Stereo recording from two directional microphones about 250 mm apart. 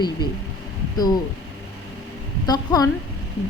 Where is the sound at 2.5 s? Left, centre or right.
Centre.